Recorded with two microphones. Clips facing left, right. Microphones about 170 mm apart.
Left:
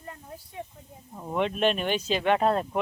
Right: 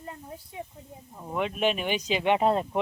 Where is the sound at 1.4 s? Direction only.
10° right (ahead or behind).